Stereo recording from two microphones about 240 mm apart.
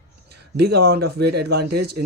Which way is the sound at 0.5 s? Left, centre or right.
Right.